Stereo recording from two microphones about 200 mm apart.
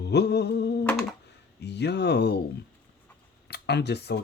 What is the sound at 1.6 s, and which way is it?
Mantra, 55° left (ahead or behind).